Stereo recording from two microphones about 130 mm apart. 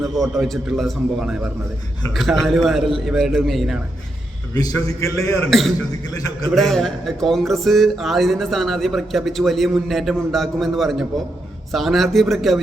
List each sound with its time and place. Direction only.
0.4 s speech: centre (ahead or behind)
4.5 s a man's voice: 30° left (ahead or behind)
5.5 s speech: centre (ahead or behind)